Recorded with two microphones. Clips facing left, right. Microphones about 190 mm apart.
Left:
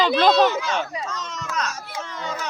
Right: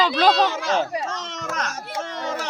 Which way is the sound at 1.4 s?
50° right (ahead or behind).